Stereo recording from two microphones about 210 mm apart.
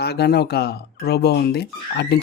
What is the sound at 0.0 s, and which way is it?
Speech, 50° left (ahead or behind).